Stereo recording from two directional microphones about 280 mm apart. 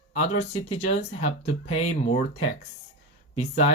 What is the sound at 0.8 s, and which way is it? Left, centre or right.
Speech, left.